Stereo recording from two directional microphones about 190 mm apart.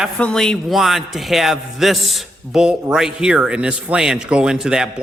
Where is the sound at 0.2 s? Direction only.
5° left (ahead or behind).